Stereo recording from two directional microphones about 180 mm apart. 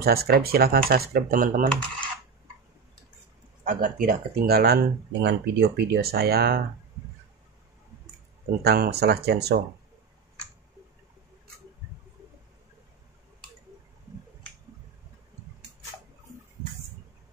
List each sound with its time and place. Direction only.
0.0 s speech: 60° right (ahead or behind)
3.6 s speech: 50° right (ahead or behind)
8.6 s speech: 60° right (ahead or behind)